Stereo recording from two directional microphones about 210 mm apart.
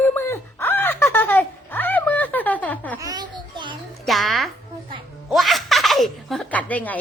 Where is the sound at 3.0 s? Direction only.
20° right (ahead or behind).